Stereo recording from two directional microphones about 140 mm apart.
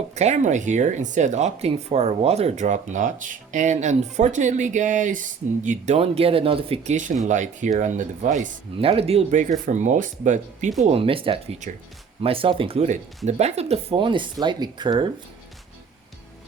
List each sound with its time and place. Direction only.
0.1 s speech: 55° right (ahead or behind)
5.6 s speech: 55° right (ahead or behind)
7.3 s speech: 60° right (ahead or behind)
8.8 s speech: 45° right (ahead or behind); by 10.7 s 60° right (ahead or behind)
10.8 s speech: 40° right (ahead or behind)